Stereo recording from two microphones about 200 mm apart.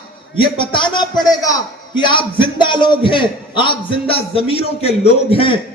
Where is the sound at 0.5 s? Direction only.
25° left (ahead or behind).